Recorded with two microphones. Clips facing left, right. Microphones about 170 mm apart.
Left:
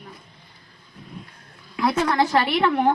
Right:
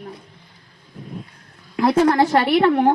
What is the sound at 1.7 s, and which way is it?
A woman's voice, 45° right (ahead or behind).